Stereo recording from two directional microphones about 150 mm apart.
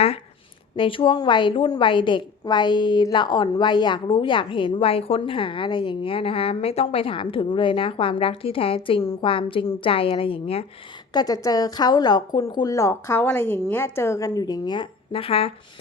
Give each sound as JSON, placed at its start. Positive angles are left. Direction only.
{"t": 0.8, "sound": "a woman's voice", "side_deg": 35}
{"t": 11.1, "sound": "a woman's voice", "side_deg": 25}